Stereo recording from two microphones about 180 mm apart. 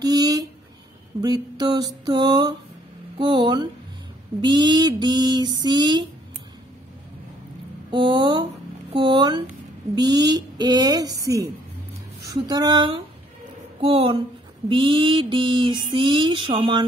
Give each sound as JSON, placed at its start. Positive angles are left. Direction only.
{"t": 0.0, "sound": "a sound", "side_deg": -20}
{"t": 1.2, "sound": "mantra", "side_deg": -20}
{"t": 7.9, "sound": "mantra", "side_deg": -25}
{"t": 13.7, "sound": "a woman's voice", "side_deg": -30}
{"t": 14.7, "sound": "mantra", "side_deg": -30}